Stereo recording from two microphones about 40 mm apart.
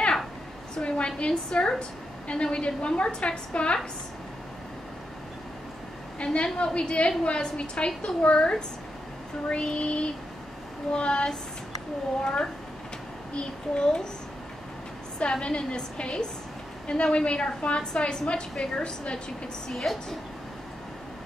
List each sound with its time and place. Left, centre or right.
0.7 s a woman's voice: left
6.1 s a woman's voice: left
13.4 s a woman's voice: left
15.3 s a woman's voice: left
19.7 s a woman's voice: centre